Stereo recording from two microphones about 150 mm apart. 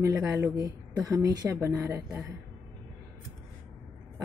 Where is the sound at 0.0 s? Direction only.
15° right (ahead or behind).